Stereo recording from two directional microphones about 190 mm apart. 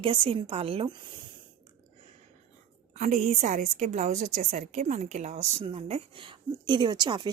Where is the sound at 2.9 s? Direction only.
40° right (ahead or behind).